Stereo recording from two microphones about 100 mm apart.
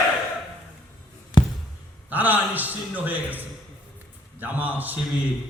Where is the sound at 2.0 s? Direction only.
15° right (ahead or behind).